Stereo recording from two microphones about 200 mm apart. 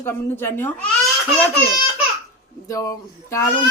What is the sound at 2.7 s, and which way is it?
Speech, 15° left (ahead or behind).